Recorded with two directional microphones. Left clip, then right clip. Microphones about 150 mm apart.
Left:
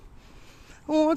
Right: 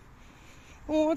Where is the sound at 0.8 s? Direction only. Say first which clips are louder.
Left 4 dB; 45° left (ahead or behind).